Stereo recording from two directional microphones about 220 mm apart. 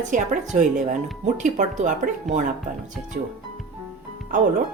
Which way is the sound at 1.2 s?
35° right (ahead or behind).